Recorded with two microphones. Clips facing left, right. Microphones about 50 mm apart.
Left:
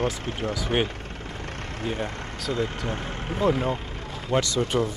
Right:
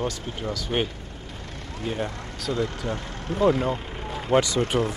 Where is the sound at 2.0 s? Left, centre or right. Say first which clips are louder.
Even; left.